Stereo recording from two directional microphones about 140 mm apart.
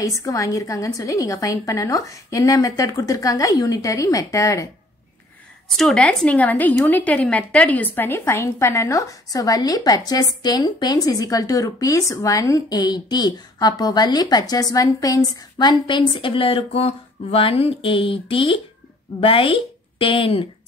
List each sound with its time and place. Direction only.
0.0 s a woman's voice: 25° left (ahead or behind)
5.7 s a woman's voice: centre (ahead or behind); by 20.4 s 40° left (ahead or behind)